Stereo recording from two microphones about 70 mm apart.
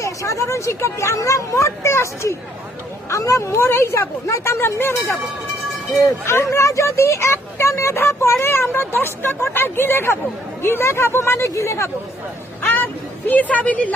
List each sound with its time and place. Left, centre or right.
0.0 s speech: left
6.2 s speech: left
12.6 s vehicle: left